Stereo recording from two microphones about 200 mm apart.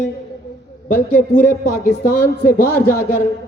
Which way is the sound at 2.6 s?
10° left (ahead or behind).